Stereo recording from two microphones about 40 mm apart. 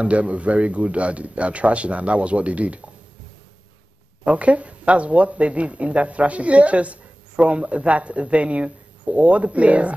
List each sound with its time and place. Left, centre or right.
0.0 s speech: right
4.2 s speech: right